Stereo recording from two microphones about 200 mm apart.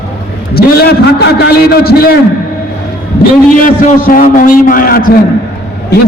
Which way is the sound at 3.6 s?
40° left (ahead or behind).